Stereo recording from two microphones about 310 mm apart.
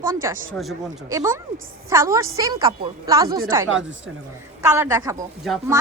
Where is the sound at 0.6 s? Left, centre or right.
Centre.